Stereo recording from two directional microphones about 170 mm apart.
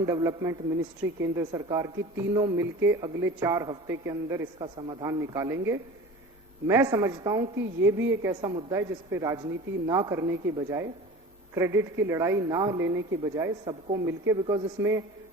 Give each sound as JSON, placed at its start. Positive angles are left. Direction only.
{"t": 0.0, "sound": "a man's voice", "side_deg": -20}
{"t": 4.6, "sound": "a woman's voice", "side_deg": -25}